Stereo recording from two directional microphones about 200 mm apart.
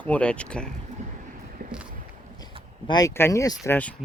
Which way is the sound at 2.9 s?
20° left (ahead or behind).